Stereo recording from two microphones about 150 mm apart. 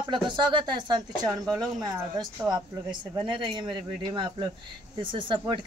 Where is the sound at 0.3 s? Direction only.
30° right (ahead or behind).